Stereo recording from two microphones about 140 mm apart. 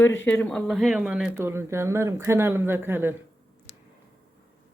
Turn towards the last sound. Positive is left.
turn(degrees=-15)  # may be behind; listen again after turning